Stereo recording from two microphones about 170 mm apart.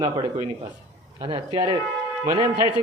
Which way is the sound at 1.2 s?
25° right (ahead or behind).